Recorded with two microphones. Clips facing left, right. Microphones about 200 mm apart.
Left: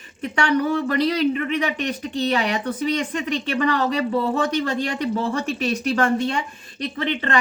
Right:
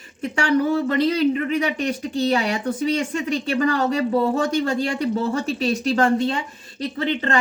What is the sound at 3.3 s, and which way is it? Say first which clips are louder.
Speech: right 1 dB; 40° right (ahead or behind).